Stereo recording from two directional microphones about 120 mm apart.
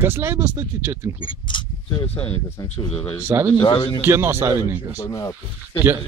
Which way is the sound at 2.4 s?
25° left (ahead or behind).